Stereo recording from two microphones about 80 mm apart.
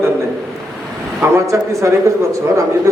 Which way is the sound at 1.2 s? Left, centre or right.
Right.